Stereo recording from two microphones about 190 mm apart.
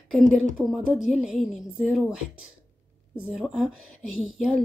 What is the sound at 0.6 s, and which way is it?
Speech, 5° right (ahead or behind).